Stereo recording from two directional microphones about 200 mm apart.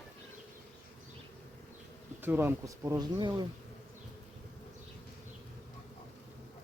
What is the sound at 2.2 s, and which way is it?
Speech, 10° right (ahead or behind).